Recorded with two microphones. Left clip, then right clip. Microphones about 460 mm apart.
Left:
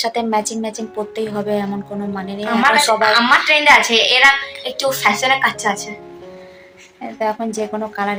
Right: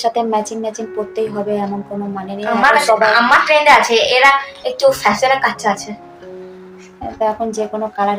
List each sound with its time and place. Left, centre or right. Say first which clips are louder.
0.0 s a woman's voice: right 2 dB; left
7.2 s a woman's voice: right 3 dB; left